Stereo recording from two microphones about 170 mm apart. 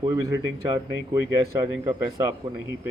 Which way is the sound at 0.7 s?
20° right (ahead or behind).